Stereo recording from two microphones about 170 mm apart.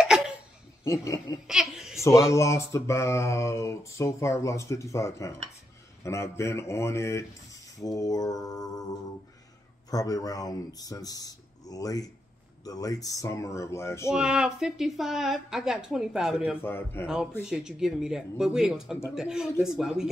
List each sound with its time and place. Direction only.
0.8 s speech: 15° left (ahead or behind)
1.5 s a sound: centre (ahead or behind)
2.0 s speech: 15° left (ahead or behind)
9.8 s speech: 20° left (ahead or behind)
14.1 s a woman's voice: 5° right (ahead or behind)
16.6 s speech: 15° left (ahead or behind)
17.0 s a woman's voice: 5° right (ahead or behind)